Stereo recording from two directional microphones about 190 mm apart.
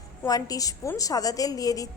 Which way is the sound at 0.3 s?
20° left (ahead or behind).